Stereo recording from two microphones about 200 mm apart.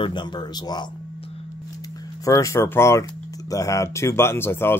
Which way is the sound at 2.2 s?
15° left (ahead or behind).